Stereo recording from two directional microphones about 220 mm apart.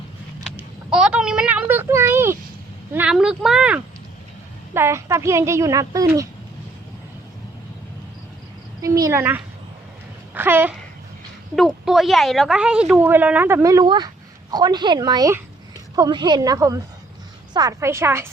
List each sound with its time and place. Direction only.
0.5 s a woman's voice: 5° right (ahead or behind)
8.8 s a woman's voice: 15° right (ahead or behind)
10.3 s a sound: 10° right (ahead or behind)
11.5 s a woman's voice: centre (ahead or behind)